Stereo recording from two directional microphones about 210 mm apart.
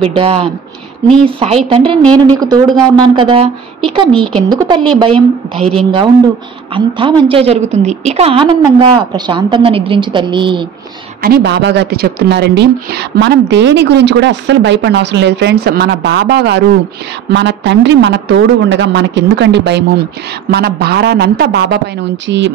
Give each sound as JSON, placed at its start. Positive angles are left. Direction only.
{"t": 0.0, "sound": "a woman's voice", "side_deg": -25}
{"t": 4.1, "sound": "a woman's voice", "side_deg": 5}
{"t": 4.5, "sound": "a woman's voice", "side_deg": -20}
{"t": 5.1, "sound": "a woman's voice", "side_deg": 0}
{"t": 6.7, "sound": "a woman's voice", "side_deg": -25}
{"t": 11.2, "sound": "a woman's voice", "side_deg": -50}